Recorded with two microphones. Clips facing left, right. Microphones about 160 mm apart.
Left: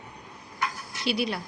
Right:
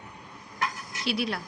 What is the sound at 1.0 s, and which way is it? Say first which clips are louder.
Speech: left 2 dB; centre (ahead or behind).